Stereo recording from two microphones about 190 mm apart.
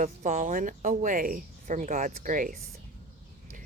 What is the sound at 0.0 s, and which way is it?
Speech, 45° right (ahead or behind).